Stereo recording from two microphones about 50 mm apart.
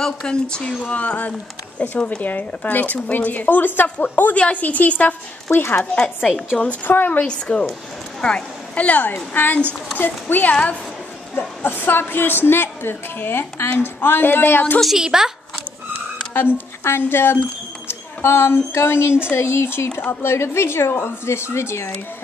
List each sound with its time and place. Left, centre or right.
0.0 s speech: centre
0.8 s a woman's voice: left
4.3 s a woman's voice: left
5.5 s a woman's voice: left
7.2 s a woman's voice: left
8.7 s a woman's voice: left
15.0 s speech: centre
16.3 s speech: left